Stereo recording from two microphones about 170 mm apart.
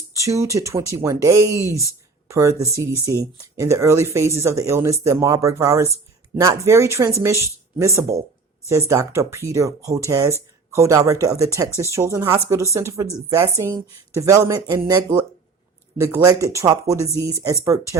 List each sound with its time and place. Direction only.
0.1 s speech: 20° right (ahead or behind)